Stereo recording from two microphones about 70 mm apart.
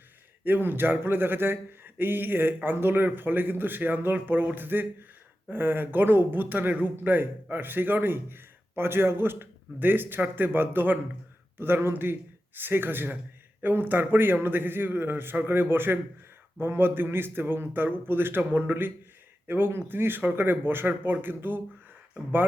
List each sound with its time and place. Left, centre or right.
0.4 s a man's voice: right